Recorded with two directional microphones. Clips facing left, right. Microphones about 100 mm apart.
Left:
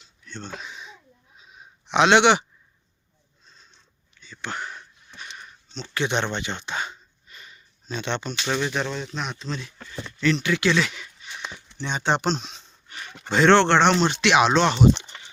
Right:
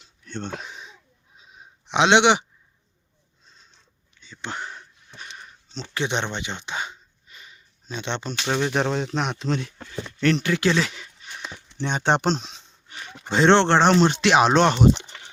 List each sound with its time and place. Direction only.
0.3 s speech: 60° right (ahead or behind)
0.7 s a sound: 40° right (ahead or behind)
1.4 s a sound: 25° right (ahead or behind)
4.2 s a sound: 25° right (ahead or behind)
8.4 s speech: 25° right (ahead or behind)
8.7 s speech: 65° right (ahead or behind)
10.3 s speech: 40° right (ahead or behind)
11.8 s speech: 55° right (ahead or behind)
12.4 s speech: 25° right (ahead or behind)